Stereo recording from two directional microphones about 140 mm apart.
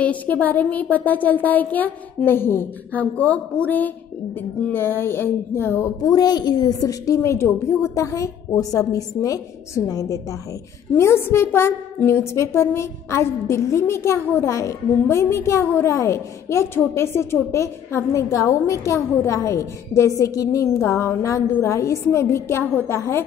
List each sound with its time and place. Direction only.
0.0 s a woman's voice: 10° left (ahead or behind)